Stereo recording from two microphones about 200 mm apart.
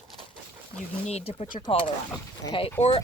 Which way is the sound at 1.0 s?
30° left (ahead or behind).